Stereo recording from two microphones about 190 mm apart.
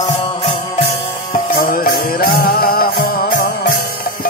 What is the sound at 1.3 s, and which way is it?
Music, 50° left (ahead or behind).